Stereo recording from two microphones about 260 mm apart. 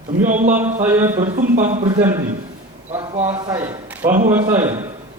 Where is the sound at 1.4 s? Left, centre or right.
Right.